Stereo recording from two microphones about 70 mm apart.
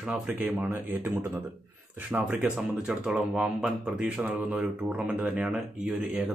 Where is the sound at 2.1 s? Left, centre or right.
Right.